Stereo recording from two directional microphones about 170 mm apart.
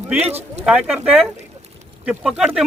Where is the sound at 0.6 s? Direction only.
5° right (ahead or behind).